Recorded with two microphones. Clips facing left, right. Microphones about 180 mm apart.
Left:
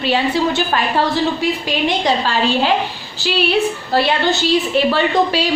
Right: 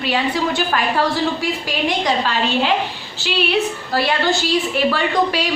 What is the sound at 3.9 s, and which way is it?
A woman's voice, 25° left (ahead or behind).